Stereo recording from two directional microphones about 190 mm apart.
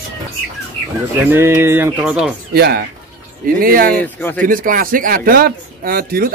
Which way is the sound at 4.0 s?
10° left (ahead or behind).